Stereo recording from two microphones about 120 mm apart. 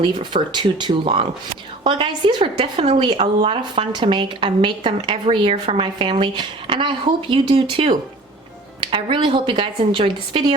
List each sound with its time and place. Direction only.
0.0 s a woman's voice: 40° right (ahead or behind)